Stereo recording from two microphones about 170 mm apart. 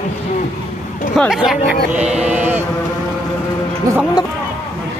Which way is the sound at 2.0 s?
40° right (ahead or behind).